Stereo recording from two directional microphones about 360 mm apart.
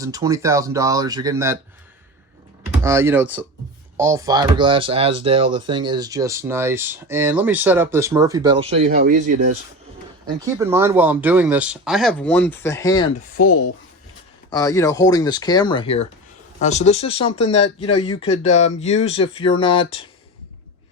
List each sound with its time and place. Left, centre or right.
0.0 s speech: centre
2.8 s speech: centre
10.2 s speech: centre
13.3 s speech: left
14.5 s speech: centre